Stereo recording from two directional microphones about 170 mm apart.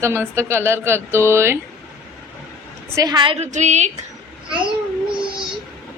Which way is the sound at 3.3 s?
45° right (ahead or behind).